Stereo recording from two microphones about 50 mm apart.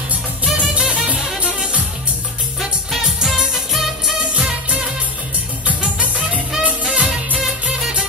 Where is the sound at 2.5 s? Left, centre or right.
Centre.